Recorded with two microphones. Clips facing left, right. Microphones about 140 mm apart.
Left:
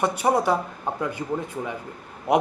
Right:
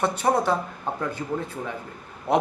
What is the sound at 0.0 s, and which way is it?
A man's voice, 10° left (ahead or behind).